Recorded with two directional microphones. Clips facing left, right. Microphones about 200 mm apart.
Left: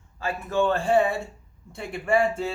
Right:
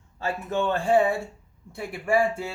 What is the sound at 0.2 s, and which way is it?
Speech, 20° right (ahead or behind).